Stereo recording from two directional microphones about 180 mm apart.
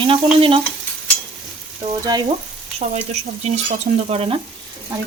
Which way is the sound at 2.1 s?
20° right (ahead or behind).